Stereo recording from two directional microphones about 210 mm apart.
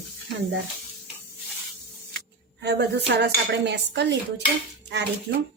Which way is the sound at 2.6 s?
55° right (ahead or behind).